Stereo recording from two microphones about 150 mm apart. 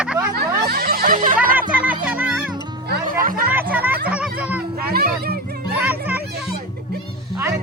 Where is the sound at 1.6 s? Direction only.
10° right (ahead or behind).